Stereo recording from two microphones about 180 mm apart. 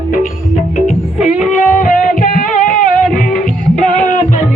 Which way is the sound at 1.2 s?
40° left (ahead or behind).